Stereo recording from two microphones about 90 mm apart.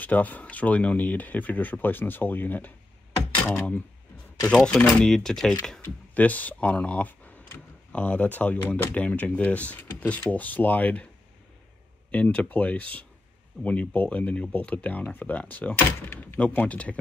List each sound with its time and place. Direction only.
0.0 s speech: 20° left (ahead or behind)
5.0 s speech: 5° left (ahead or behind)
6.1 s speech: 15° left (ahead or behind)
12.1 s speech: 15° left (ahead or behind)